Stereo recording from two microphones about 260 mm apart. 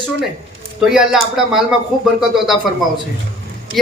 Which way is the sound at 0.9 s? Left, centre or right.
Centre.